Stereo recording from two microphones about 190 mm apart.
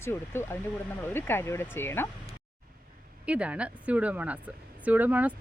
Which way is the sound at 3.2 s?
5° right (ahead or behind).